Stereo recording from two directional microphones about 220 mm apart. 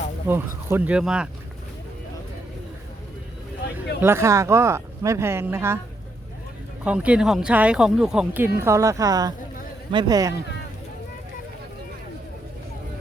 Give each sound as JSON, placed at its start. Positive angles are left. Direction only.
{"t": 0.3, "sound": "speech", "side_deg": -10}
{"t": 4.0, "sound": "speech", "side_deg": -10}
{"t": 6.8, "sound": "speech", "side_deg": -5}